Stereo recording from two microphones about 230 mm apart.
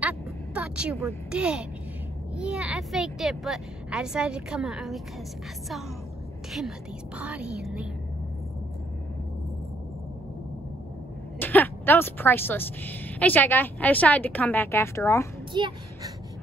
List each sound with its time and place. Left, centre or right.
0.6 s a woman's voice: centre
7.2 s speech: centre
11.3 s a woman's voice: centre
15.5 s speech: right